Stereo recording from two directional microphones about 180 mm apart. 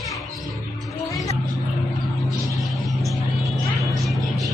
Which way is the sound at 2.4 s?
Centre (ahead or behind).